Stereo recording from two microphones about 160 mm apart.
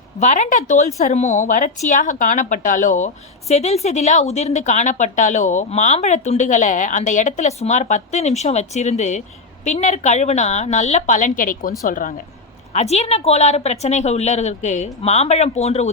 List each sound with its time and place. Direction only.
0.2 s a woman's voice: 50° left (ahead or behind)
12.7 s a woman's voice: 45° left (ahead or behind)